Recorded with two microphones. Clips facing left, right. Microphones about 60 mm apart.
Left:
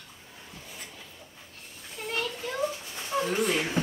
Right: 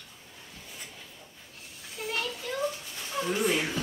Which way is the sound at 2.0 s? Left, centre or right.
Centre.